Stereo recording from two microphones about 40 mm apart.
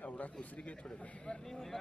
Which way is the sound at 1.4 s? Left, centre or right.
Centre.